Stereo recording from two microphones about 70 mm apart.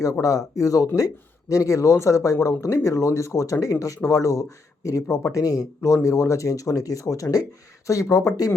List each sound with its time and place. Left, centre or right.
0.0 s speech: left
5.0 s speech: left